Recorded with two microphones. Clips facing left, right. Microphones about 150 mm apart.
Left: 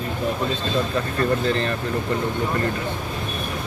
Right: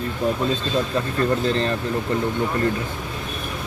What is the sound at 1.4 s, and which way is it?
Speech, 35° right (ahead or behind).